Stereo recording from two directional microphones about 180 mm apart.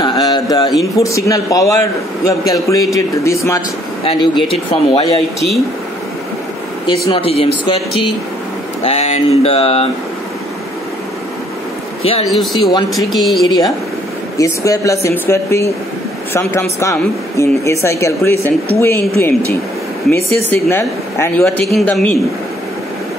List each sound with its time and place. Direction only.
0.0 s mantra: 25° left (ahead or behind)
0.9 s a man's voice: 15° left (ahead or behind)
4.0 s a sound: 30° left (ahead or behind)
7.1 s a sound: 30° left (ahead or behind)
8.8 s a sound: 40° left (ahead or behind)
12.3 s a woman's voice: centre (ahead or behind)
14.4 s a man's voice: 15° left (ahead or behind)
16.8 s a man's voice: 15° left (ahead or behind)
20.4 s a man's voice: 10° left (ahead or behind)
21.7 s a woman's voice: 5° left (ahead or behind)